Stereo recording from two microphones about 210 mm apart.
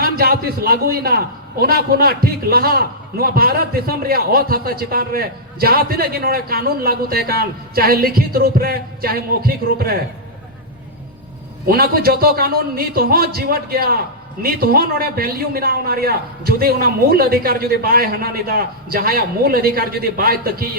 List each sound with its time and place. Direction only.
0.0 s a man's voice: 45° right (ahead or behind)
11.6 s a man's voice: 45° right (ahead or behind)